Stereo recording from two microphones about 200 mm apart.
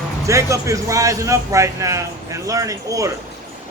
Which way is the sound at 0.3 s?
15° right (ahead or behind).